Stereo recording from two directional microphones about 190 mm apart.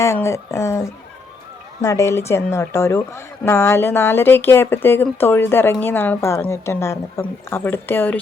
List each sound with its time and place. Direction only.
0.0 s speech: 15° left (ahead or behind)